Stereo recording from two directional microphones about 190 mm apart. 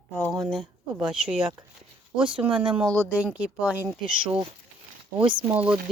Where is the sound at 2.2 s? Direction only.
25° right (ahead or behind).